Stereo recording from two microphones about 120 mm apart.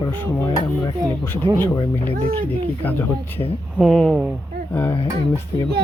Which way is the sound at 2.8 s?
15° left (ahead or behind).